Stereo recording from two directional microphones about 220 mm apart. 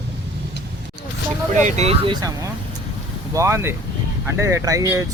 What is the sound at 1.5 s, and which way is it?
Speech, 30° right (ahead or behind).